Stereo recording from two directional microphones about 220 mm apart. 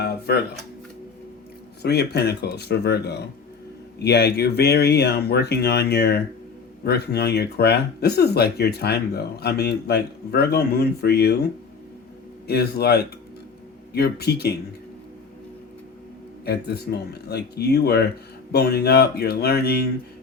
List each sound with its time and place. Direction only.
0.0 s speech: 45° left (ahead or behind)
1.8 s speech: 45° left (ahead or behind)
12.5 s speech: 45° left (ahead or behind)
16.5 s speech: 45° left (ahead or behind)